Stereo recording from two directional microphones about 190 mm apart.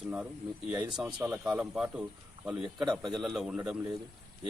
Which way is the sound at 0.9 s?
5° right (ahead or behind).